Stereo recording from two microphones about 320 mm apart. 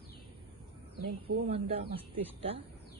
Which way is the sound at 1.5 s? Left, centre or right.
Centre.